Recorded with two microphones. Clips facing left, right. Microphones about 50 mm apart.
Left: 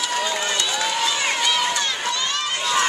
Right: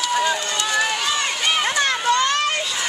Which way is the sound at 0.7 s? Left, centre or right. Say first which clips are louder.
Right 3 dB; right.